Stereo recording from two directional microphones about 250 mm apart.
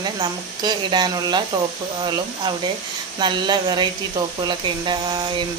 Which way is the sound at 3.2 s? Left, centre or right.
Centre.